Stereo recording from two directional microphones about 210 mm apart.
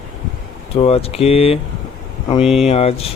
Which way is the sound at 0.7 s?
30° left (ahead or behind).